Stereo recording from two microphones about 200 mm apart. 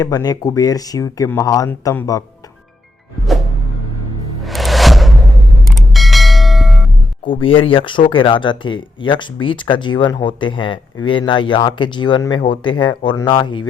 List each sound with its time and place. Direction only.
0.0 s speech: 20° left (ahead or behind)
4.4 s music: centre (ahead or behind)
5.6 s bell: centre (ahead or behind)
7.3 s speech: 25° left (ahead or behind)